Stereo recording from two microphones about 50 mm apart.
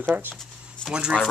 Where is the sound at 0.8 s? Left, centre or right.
Centre.